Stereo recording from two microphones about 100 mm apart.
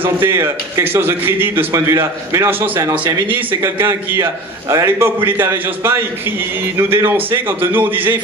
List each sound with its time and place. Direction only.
0.0 s a man's voice: 25° right (ahead or behind)